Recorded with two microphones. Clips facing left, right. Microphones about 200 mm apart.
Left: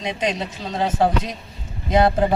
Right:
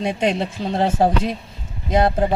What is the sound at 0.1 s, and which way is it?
Speech, 50° right (ahead or behind).